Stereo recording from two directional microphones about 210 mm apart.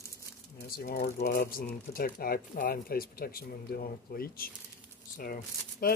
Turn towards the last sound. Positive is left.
turn(degrees=45)  # may be behind; listen again after turning